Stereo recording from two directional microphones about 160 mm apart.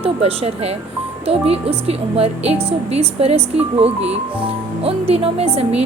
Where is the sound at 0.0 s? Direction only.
40° right (ahead or behind).